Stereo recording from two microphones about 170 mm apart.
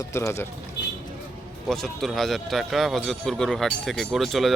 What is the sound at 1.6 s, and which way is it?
Speech, centre (ahead or behind).